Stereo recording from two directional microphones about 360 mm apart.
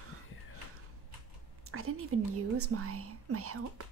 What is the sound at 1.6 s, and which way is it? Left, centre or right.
Speech, right.